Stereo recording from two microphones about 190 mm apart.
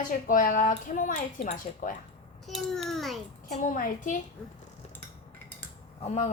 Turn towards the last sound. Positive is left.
turn(degrees=35)  # may be behind; listen again after turning